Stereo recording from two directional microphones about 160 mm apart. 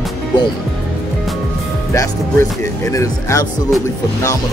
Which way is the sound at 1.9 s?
20° left (ahead or behind).